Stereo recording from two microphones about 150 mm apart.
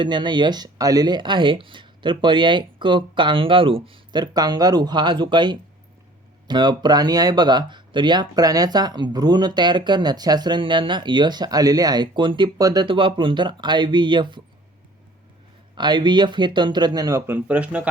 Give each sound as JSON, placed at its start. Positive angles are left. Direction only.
{"t": 0.0, "sound": "speech", "side_deg": -30}
{"t": 15.7, "sound": "speech", "side_deg": -30}